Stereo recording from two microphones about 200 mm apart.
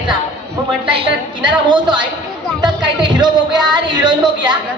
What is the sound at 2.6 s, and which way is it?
Music, 20° right (ahead or behind).